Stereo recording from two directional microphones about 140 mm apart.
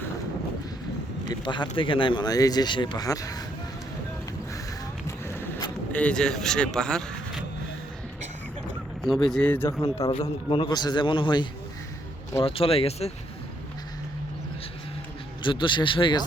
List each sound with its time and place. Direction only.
1.3 s speech: 30° left (ahead or behind)
5.0 s a sound: 20° left (ahead or behind)
5.9 s speech: 10° left (ahead or behind)
9.0 s speech: centre (ahead or behind)
10.0 s speech: 45° left (ahead or behind)
10.5 s speech: 30° left (ahead or behind)
15.4 s speech: 35° left (ahead or behind)